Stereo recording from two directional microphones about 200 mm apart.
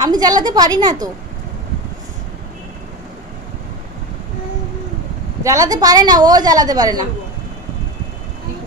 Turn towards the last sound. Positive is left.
turn(degrees=-20)  # may be behind; listen again after turning